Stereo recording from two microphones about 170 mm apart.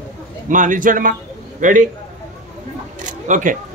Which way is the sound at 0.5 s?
50° right (ahead or behind).